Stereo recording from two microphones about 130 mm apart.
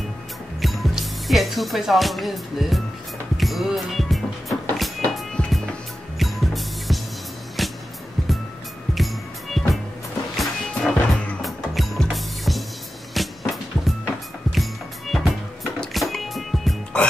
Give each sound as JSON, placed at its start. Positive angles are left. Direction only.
{"t": 0.6, "sound": "speech", "side_deg": 0}
{"t": 3.3, "sound": "music", "side_deg": 0}
{"t": 8.9, "sound": "music", "side_deg": 0}